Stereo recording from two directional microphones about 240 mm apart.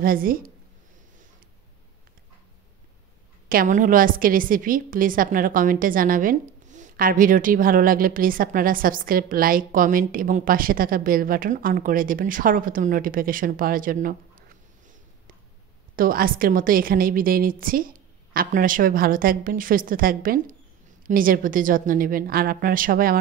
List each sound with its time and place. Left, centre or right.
0.0 s a woman's voice: right
3.4 s a woman's voice: right
16.0 s a woman's voice: right